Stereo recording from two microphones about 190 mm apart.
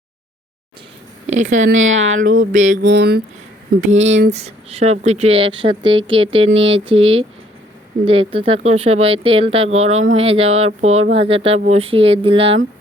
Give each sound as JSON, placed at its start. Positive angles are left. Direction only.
{"t": 1.3, "sound": "speech", "side_deg": -40}
{"t": 1.6, "sound": "speech", "side_deg": -85}
{"t": 2.1, "sound": "a sound", "side_deg": -45}
{"t": 2.5, "sound": "speech", "side_deg": -40}
{"t": 2.8, "sound": "speech", "side_deg": -65}
{"t": 3.8, "sound": "speech", "side_deg": -40}